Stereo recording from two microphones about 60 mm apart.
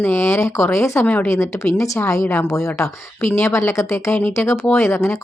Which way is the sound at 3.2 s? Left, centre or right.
Left.